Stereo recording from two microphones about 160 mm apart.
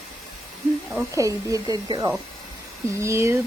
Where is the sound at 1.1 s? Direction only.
20° right (ahead or behind).